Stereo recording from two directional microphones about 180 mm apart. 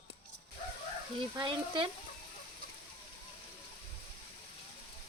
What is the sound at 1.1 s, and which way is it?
Speech, 30° right (ahead or behind).